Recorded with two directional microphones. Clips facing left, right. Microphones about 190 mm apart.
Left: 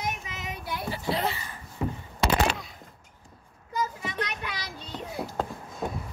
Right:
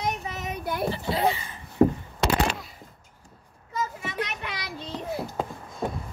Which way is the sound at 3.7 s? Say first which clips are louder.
Even; 25° right (ahead or behind).